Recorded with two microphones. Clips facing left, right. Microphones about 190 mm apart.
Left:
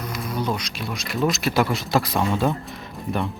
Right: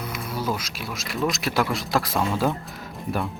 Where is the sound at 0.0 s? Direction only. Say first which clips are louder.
Left 2 dB; 5° right (ahead or behind).